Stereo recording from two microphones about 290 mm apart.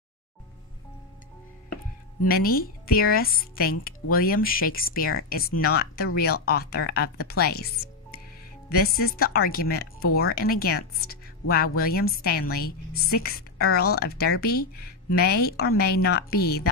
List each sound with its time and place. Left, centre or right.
2.2 s speech: left